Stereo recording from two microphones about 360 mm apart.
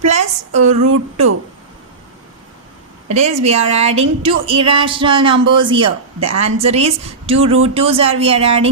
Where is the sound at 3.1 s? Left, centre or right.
Centre.